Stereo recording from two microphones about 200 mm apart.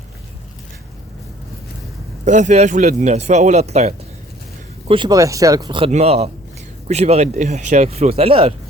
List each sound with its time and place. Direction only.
2.2 s speech: 35° right (ahead or behind)
4.9 s speech: 20° right (ahead or behind)